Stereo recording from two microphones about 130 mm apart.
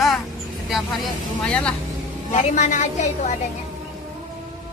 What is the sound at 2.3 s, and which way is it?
Speech, 65° left (ahead or behind).